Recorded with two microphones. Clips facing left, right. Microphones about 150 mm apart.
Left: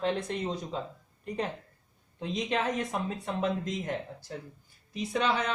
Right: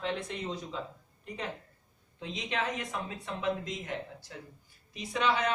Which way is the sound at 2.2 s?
40° left (ahead or behind).